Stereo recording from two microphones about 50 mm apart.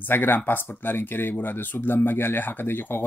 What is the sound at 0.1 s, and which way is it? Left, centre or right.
Speech, left.